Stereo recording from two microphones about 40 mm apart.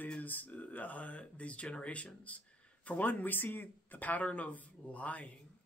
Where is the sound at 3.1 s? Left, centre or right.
Left.